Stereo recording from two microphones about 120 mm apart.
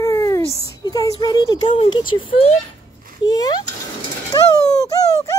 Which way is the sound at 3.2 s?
35° left (ahead or behind).